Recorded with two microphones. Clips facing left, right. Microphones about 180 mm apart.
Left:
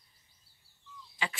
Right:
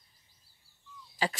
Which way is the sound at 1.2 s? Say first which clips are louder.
Right 6 dB; 35° right (ahead or behind).